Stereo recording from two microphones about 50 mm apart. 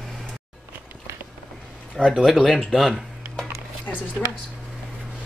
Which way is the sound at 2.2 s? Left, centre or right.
Centre.